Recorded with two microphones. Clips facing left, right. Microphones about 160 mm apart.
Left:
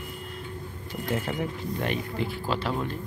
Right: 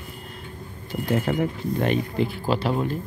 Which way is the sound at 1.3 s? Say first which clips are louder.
Right 7 dB; 55° right (ahead or behind).